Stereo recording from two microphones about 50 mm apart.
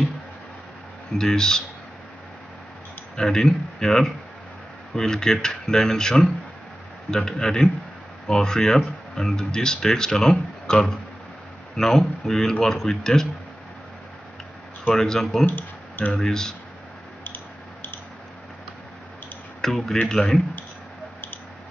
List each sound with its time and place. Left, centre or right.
1.1 s speech: centre
3.2 s speech: centre
15.0 s speech: centre
15.4 s a sound: left
16.1 s speech: centre
19.6 s speech: centre